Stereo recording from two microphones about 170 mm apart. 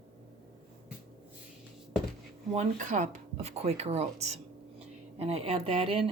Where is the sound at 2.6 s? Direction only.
45° right (ahead or behind).